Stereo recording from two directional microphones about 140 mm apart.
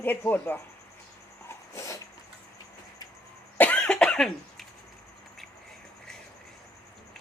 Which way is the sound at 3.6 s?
10° left (ahead or behind).